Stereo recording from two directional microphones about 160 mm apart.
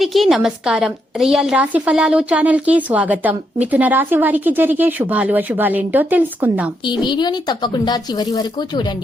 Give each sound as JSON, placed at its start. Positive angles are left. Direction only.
{"t": 0.0, "sound": "a woman's voice", "side_deg": 0}
{"t": 6.8, "sound": "a woman's voice", "side_deg": 30}